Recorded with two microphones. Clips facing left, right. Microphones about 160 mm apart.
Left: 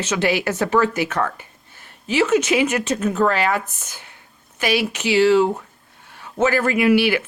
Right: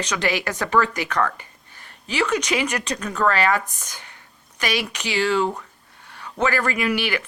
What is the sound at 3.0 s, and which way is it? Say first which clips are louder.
Speech: left 3 dB; 25° left (ahead or behind).